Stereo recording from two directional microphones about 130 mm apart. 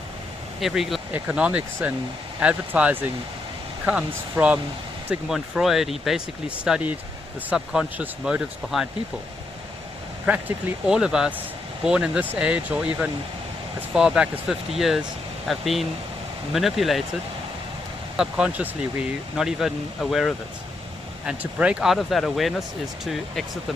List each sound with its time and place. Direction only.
0.6 s speech: centre (ahead or behind)
1.1 s speech: 10° right (ahead or behind)
10.3 s speech: 10° right (ahead or behind)
18.2 s speech: 5° right (ahead or behind)